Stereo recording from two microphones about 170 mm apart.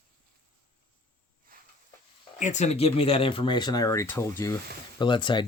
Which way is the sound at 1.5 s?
55° right (ahead or behind).